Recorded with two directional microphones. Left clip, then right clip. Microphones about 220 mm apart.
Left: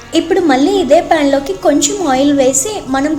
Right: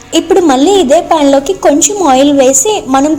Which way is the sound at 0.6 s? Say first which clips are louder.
Right 3 dB; 20° right (ahead or behind).